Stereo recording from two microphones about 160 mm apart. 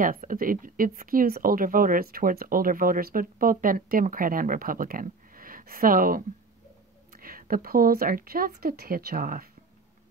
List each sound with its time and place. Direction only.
0.0 s speech: 60° right (ahead or behind)